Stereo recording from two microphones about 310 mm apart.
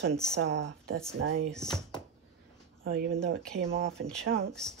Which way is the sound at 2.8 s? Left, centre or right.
Right.